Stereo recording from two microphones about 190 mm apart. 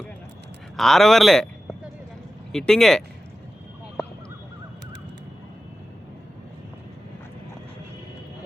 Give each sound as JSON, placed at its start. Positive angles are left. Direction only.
{"t": 0.8, "sound": "speech", "side_deg": 0}
{"t": 2.5, "sound": "speech", "side_deg": 5}